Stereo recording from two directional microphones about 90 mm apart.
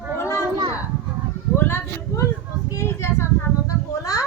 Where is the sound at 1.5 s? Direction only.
25° left (ahead or behind).